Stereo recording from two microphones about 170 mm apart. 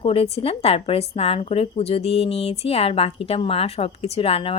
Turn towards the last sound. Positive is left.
turn(degrees=35)  # may be behind; listen again after turning